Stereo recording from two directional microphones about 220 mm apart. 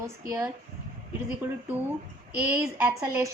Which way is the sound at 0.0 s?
10° right (ahead or behind).